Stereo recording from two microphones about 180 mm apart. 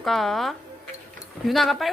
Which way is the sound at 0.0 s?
Centre (ahead or behind).